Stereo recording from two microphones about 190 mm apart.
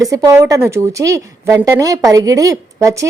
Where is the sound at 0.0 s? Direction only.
15° right (ahead or behind).